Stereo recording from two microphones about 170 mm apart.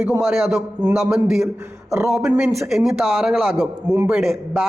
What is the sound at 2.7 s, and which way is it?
A man's voice, centre (ahead or behind).